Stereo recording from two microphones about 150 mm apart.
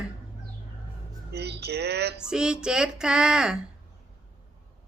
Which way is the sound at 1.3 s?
90° right.